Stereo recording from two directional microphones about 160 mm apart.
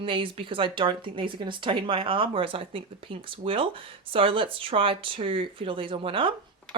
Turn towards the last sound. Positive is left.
turn(degrees=-35)  # may be behind; listen again after turning